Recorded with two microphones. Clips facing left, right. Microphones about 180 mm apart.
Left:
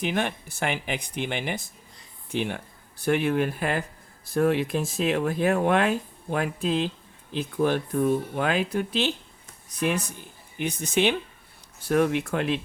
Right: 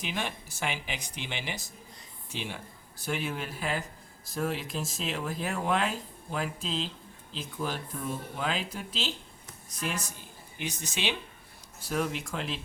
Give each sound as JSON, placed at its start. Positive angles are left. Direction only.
{"t": 0.0, "sound": "speech", "side_deg": 55}